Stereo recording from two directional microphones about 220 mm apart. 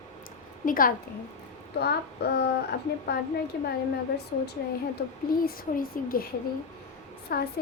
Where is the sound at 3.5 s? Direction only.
45° left (ahead or behind).